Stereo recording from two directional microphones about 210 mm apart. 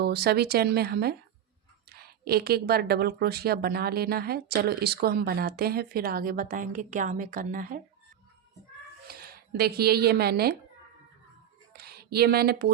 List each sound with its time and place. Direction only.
0.0 s speech: 50° right (ahead or behind)
9.0 s speech: 45° right (ahead or behind)
11.7 s a sound: 50° right (ahead or behind)